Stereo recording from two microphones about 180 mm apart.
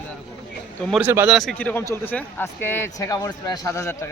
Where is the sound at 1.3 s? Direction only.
5° left (ahead or behind).